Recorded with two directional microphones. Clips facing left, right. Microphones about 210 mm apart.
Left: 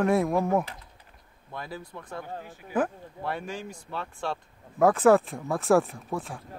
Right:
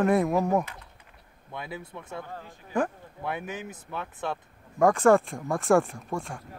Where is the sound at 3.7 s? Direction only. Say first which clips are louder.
Even; 20° right (ahead or behind).